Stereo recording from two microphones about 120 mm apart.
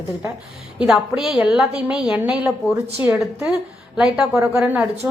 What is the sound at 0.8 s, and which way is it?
A woman's voice, 5° right (ahead or behind).